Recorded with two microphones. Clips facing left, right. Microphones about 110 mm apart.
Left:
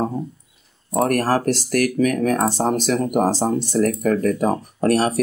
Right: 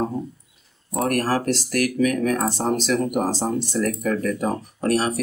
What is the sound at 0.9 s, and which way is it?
Speech, 35° left (ahead or behind).